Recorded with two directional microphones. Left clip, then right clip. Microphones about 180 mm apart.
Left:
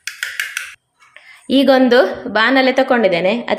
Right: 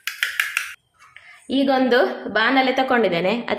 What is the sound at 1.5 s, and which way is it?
A woman's voice, 30° left (ahead or behind).